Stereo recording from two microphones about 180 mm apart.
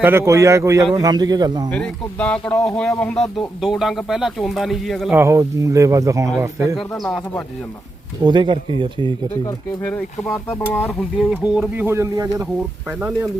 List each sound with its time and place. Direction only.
0.0 s speech: 15° right (ahead or behind)
1.7 s speech: 5° left (ahead or behind)
5.1 s speech: 15° right (ahead or behind)
6.9 s speech: centre (ahead or behind)
8.2 s speech: 25° right (ahead or behind)
9.8 s speech: 10° left (ahead or behind)
11.2 s speech: 5° right (ahead or behind)
13.0 s speech: 10° right (ahead or behind)